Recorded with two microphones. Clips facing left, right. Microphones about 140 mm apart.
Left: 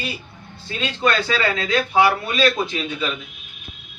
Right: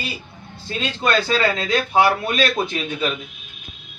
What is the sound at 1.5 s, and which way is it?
Speech, 40° right (ahead or behind).